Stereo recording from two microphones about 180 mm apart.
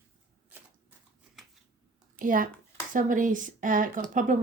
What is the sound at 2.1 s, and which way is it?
Speech, 50° right (ahead or behind).